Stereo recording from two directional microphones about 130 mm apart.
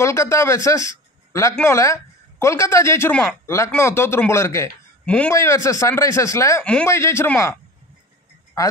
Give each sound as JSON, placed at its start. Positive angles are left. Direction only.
{"t": 0.0, "sound": "a woman's voice", "side_deg": 20}
{"t": 5.0, "sound": "a man's voice", "side_deg": 10}
{"t": 5.3, "sound": "a woman's voice", "side_deg": 20}
{"t": 6.6, "sound": "speech", "side_deg": 10}
{"t": 6.9, "sound": "a woman's voice", "side_deg": 20}